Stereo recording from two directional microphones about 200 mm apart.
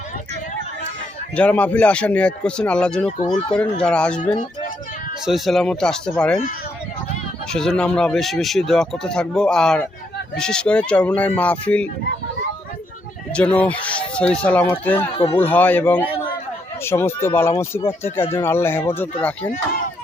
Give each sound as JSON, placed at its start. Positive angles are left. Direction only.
{"t": 1.4, "sound": "speech", "side_deg": 5}
{"t": 3.1, "sound": "speech", "side_deg": 30}
{"t": 3.5, "sound": "speech", "side_deg": 5}
{"t": 5.2, "sound": "speech", "side_deg": 0}
{"t": 7.5, "sound": "speech", "side_deg": 5}
{"t": 13.3, "sound": "speech", "side_deg": 5}